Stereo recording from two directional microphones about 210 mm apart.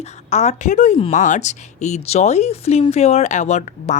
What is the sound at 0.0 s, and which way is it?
Speech, 30° left (ahead or behind).